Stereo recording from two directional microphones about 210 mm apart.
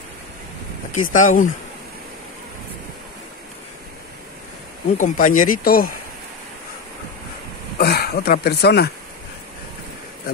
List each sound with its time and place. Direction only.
0.9 s speech: 40° left (ahead or behind)
4.9 s speech: 40° left (ahead or behind)
7.8 s speech: 45° left (ahead or behind)